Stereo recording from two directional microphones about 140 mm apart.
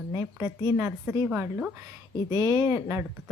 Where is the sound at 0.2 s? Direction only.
20° right (ahead or behind).